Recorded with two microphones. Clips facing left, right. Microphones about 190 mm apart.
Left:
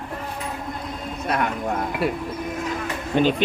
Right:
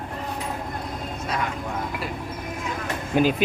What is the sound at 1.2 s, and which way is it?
Speech, 60° left (ahead or behind).